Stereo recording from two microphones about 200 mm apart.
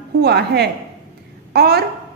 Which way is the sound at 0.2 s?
55° right (ahead or behind).